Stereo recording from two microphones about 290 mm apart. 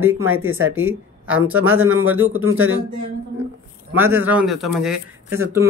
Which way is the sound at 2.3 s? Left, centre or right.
Right.